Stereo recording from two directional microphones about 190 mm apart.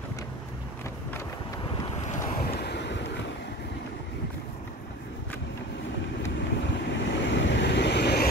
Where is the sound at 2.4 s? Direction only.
55° left (ahead or behind).